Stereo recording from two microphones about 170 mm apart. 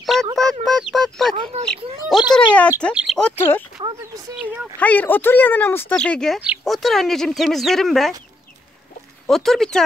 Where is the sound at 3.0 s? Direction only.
Centre (ahead or behind).